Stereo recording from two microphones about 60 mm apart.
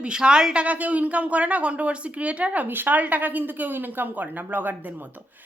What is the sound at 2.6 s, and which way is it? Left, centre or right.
A woman's voice, right.